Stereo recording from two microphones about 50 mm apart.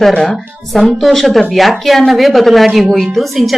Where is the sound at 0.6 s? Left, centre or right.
Centre.